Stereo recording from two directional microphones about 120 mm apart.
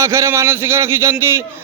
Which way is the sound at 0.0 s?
25° right (ahead or behind).